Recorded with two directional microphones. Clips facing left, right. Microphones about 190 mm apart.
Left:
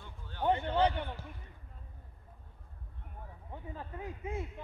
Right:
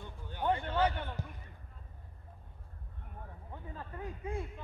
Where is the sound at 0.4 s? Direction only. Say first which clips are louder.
Left 2 dB; 20° left (ahead or behind).